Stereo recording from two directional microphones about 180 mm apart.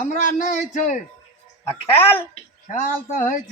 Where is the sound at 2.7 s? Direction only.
45° left (ahead or behind).